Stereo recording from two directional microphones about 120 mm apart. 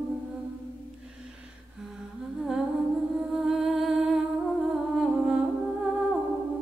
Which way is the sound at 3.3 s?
5° right (ahead or behind).